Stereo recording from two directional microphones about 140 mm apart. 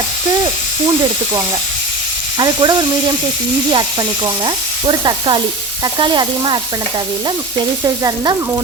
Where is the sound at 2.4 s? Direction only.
30° right (ahead or behind).